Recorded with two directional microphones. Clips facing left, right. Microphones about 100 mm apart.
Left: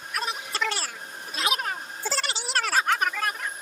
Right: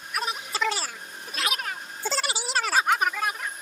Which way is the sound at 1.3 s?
30° left (ahead or behind).